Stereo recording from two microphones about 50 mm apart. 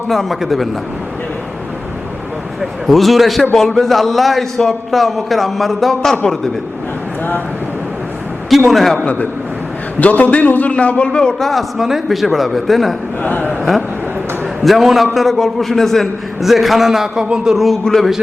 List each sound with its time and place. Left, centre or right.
0.1 s a man's voice: centre
2.8 s a man's voice: centre
8.4 s a man's voice: centre
10.0 s a man's voice: left
11.3 s a man's voice: centre
11.8 s a man's voice: centre
13.2 s a sound: left
13.5 s a man's voice: centre